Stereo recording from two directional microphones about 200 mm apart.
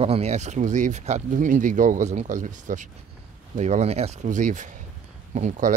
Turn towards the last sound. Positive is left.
turn(degrees=-40)  # may be behind; listen again after turning